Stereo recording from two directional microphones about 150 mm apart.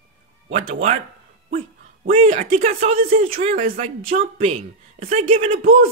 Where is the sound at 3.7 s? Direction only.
60° right (ahead or behind).